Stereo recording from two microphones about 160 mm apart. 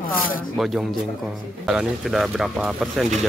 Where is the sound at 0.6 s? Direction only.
Centre (ahead or behind).